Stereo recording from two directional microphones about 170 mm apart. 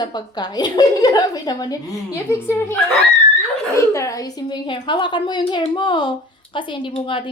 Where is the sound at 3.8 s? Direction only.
20° left (ahead or behind).